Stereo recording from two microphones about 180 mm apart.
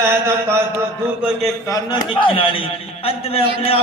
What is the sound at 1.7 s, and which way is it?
A man's voice, 25° left (ahead or behind).